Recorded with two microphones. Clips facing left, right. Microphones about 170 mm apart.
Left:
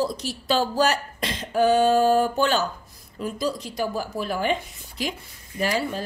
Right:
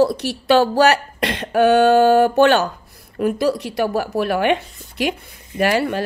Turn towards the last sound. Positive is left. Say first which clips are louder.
# right 7 dB
turn(degrees=-70)  # may be behind; listen again after turning